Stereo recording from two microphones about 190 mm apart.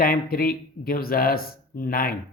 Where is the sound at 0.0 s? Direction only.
50° left (ahead or behind).